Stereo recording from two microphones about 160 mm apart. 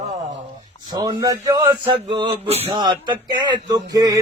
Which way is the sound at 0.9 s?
25° right (ahead or behind).